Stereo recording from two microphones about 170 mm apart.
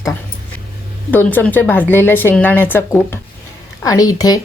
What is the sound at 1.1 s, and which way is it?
A woman's voice, 10° left (ahead or behind).